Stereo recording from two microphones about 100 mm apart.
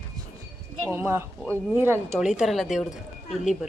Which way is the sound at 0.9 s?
20° right (ahead or behind).